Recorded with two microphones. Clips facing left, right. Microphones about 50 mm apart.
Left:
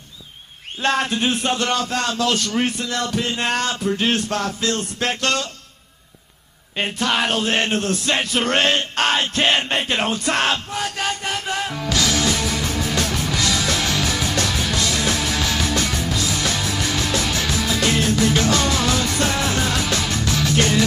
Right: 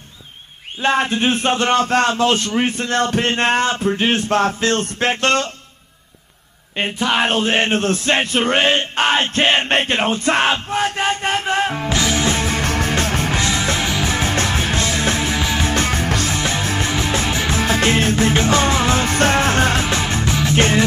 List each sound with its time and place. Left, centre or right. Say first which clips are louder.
0.8 s speech: right 3 dB; right
6.8 s speech: right 3 dB; centre
7.2 s male singing: right 3 dB; right
10.8 s music: right 5 dB; right
12.6 s music: right 3 dB; right
16.3 s music: right 3 dB; right